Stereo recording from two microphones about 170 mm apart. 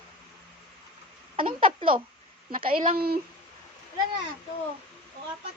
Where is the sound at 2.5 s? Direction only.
60° right (ahead or behind).